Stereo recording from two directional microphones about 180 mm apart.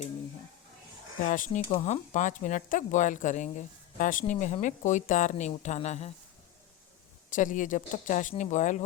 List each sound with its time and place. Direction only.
1.3 s speech: 45° left (ahead or behind)
7.3 s speech: 45° left (ahead or behind)